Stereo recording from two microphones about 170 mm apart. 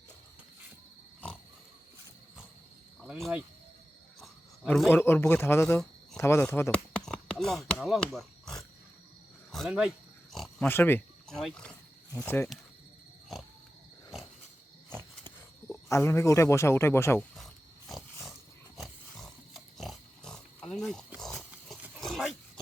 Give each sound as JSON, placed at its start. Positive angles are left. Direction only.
{"t": 3.0, "sound": "cricket", "side_deg": -5}
{"t": 4.9, "sound": "speech", "side_deg": 15}
{"t": 10.3, "sound": "oink", "side_deg": 0}
{"t": 10.7, "sound": "speech", "side_deg": 10}
{"t": 14.8, "sound": "a sound", "side_deg": -15}
{"t": 15.7, "sound": "speech", "side_deg": 15}
{"t": 17.3, "sound": "a sound", "side_deg": 0}
{"t": 18.8, "sound": "pig", "side_deg": 0}
{"t": 21.2, "sound": "dog", "side_deg": 5}